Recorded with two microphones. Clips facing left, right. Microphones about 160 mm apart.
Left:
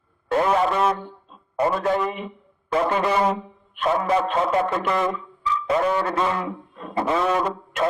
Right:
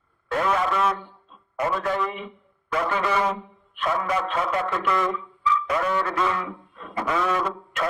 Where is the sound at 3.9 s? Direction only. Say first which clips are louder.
Left 5 dB; 30° left (ahead or behind).